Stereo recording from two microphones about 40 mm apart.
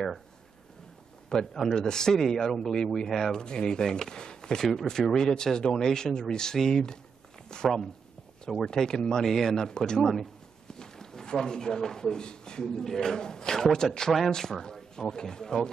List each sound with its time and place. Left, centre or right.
1.3 s a man's voice: centre
4.6 s a man's voice: centre